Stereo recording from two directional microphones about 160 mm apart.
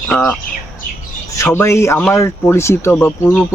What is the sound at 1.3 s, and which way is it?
Speech, 15° left (ahead or behind).